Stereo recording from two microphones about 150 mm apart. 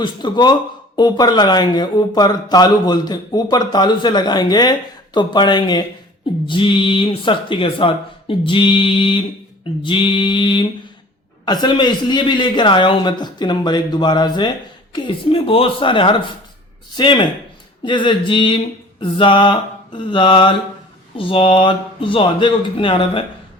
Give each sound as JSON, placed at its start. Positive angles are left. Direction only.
{"t": 0.0, "sound": "speech", "side_deg": 30}